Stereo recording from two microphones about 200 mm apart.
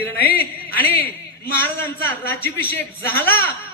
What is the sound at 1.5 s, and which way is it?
A man's voice, 10° left (ahead or behind).